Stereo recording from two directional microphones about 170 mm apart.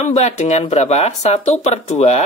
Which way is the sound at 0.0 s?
40° left (ahead or behind).